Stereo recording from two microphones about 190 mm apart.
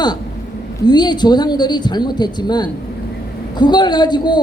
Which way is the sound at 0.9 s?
20° left (ahead or behind).